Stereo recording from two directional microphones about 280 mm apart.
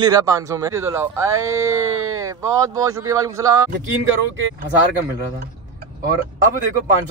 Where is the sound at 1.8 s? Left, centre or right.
Right.